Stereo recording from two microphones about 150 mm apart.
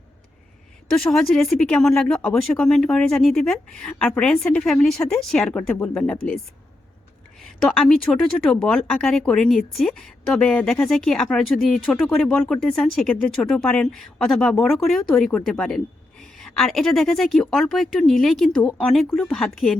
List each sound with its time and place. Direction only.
0.9 s speech: centre (ahead or behind)